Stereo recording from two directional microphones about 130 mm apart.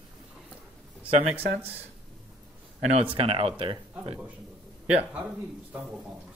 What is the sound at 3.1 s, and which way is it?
Speech, 45° right (ahead or behind).